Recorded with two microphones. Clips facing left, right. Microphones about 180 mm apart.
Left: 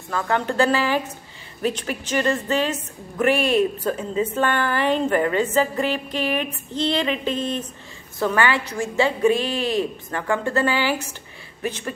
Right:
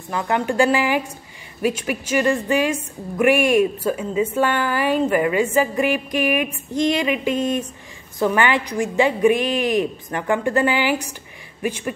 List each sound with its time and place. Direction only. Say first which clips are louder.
0.1 s a woman's voice: right 2 dB; 15° right (ahead or behind)